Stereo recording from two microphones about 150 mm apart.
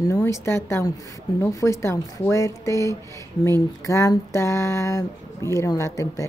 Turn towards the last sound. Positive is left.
turn(degrees=20)  # may be behind; listen again after turning